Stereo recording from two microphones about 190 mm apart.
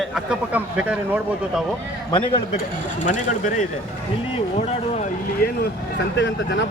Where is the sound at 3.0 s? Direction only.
40° left (ahead or behind).